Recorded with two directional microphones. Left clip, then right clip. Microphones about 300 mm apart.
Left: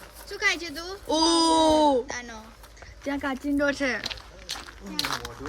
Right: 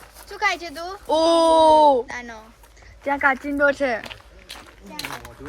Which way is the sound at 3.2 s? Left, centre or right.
Centre.